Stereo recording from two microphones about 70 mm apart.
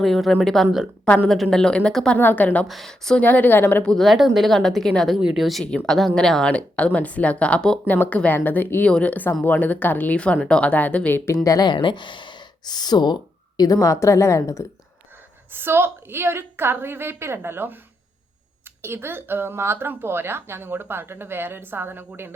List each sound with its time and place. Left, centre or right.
0.0 s speech: centre
1.0 s speech: centre
1.3 s speech: centre
2.1 s speech: left
2.6 s speech: centre
3.2 s speech: left
3.8 s speech: centre
5.1 s speech: centre
7.9 s speech: left
10.4 s speech: centre
11.4 s speech: left
13.7 s a woman's voice: left
15.5 s speech: right
18.8 s speech: right